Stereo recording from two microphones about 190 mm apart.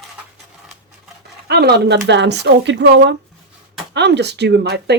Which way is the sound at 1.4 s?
60° right (ahead or behind).